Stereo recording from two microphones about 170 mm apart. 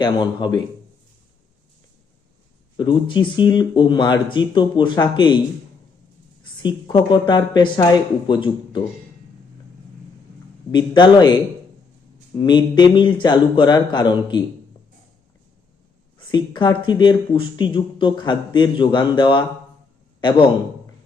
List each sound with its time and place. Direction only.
0.0 s speech: 25° left (ahead or behind)
2.7 s speech: 30° left (ahead or behind)
6.4 s speech: 25° left (ahead or behind)
10.7 s speech: 25° left (ahead or behind)
12.4 s speech: 25° left (ahead or behind)
16.1 s speech: 25° left (ahead or behind)